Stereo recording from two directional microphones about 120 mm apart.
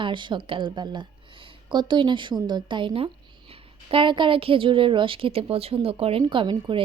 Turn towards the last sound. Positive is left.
turn(degrees=-45)  # may be behind; listen again after turning